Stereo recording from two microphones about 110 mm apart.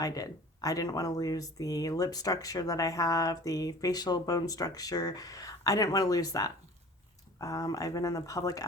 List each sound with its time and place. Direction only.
0.0 s speech: 30° left (ahead or behind)